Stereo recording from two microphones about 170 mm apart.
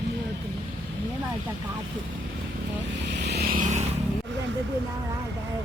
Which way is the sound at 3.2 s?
65° right (ahead or behind).